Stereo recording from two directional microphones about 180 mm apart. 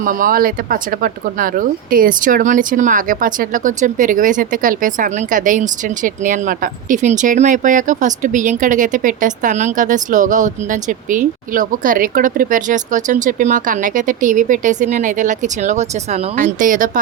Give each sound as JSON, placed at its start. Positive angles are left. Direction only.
{"t": 0.0, "sound": "speech", "side_deg": -50}